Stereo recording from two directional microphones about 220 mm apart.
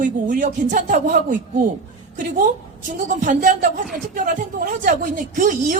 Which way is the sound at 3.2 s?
35° right (ahead or behind).